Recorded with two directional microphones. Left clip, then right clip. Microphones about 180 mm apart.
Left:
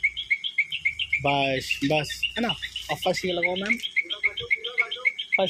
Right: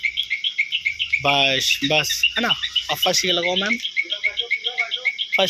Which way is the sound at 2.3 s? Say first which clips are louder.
Right 8 dB; 5° left (ahead or behind).